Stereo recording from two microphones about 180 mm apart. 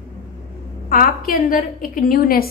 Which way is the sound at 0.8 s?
50° left (ahead or behind).